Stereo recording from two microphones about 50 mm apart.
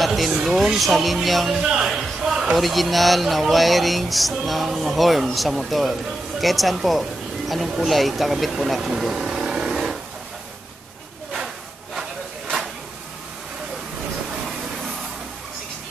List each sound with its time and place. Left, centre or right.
0.0 s a sound: centre
0.5 s speech: centre
1.6 s a man's voice: centre
2.5 s speech: centre
11.3 s a sound: centre
14.8 s vehicle: centre